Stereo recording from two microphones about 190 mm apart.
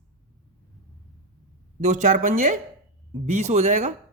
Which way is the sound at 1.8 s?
40° right (ahead or behind).